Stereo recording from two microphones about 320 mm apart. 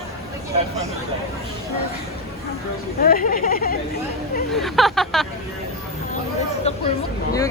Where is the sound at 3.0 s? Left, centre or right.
Left.